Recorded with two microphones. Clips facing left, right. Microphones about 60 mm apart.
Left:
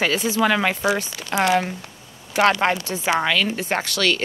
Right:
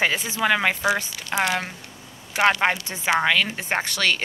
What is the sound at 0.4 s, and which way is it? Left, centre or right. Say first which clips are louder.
Speech: even; centre.